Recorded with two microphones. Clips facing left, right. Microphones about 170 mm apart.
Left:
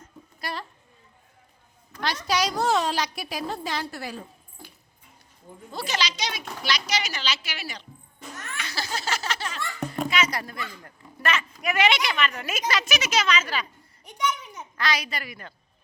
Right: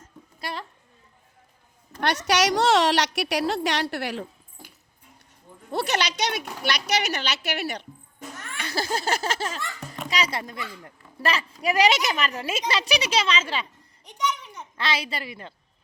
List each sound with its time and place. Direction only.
0.3 s a sound: 25° right (ahead or behind)
2.0 s a woman's voice: 70° right (ahead or behind)
5.7 s a woman's voice: 65° right (ahead or behind)
8.7 s a sound: 45° right (ahead or behind)
10.1 s speech: 35° right (ahead or behind)
10.4 s a woman's voice: 20° right (ahead or behind)
11.2 s a woman's voice: 35° right (ahead or behind)
14.0 s a sound: 10° left (ahead or behind)
14.8 s a woman's voice: 25° right (ahead or behind)